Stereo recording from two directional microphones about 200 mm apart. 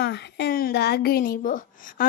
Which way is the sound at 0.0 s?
60° left (ahead or behind).